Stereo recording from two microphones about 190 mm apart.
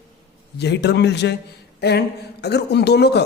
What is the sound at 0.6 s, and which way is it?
A man's voice, 60° left (ahead or behind).